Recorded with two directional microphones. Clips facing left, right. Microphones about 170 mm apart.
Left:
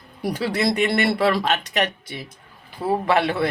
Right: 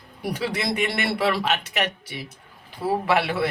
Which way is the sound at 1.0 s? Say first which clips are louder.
Left 3 dB; 45° left (ahead or behind).